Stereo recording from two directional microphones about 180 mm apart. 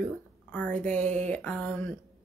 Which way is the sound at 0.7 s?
40° right (ahead or behind).